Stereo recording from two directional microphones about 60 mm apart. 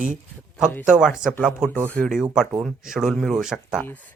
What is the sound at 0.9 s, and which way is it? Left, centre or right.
Speech, centre.